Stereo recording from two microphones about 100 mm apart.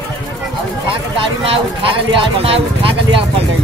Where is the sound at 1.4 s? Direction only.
70° right (ahead or behind).